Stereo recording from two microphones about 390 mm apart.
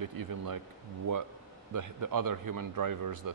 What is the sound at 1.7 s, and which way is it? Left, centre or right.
Speech, right.